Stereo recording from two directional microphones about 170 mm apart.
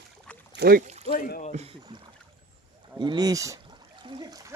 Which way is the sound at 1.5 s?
35° right (ahead or behind).